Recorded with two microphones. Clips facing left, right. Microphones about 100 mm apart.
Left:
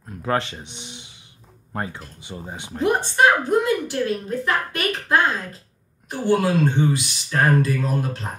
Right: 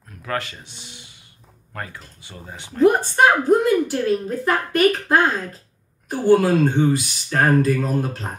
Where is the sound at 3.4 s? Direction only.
40° right (ahead or behind).